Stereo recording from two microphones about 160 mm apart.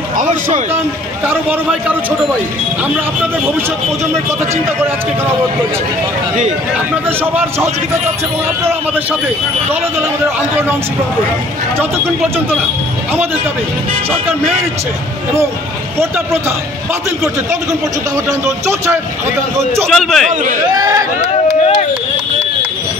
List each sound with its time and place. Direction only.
0.2 s a man's voice: 55° right (ahead or behind)
1.3 s a man's voice: 10° right (ahead or behind)
7.3 s a man's voice: 15° right (ahead or behind)
19.9 s a man's voice: centre (ahead or behind)
20.7 s speech: 20° right (ahead or behind)